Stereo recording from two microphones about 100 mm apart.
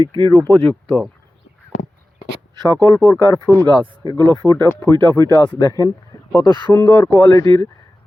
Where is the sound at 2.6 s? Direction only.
40° right (ahead or behind).